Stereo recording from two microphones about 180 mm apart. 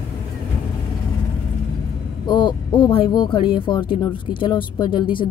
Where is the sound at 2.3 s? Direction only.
25° left (ahead or behind).